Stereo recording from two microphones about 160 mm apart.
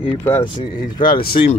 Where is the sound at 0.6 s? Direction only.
65° left (ahead or behind).